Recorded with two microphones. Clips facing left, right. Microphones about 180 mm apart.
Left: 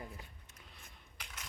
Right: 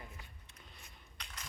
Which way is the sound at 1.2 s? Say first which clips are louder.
Even; 5° left (ahead or behind).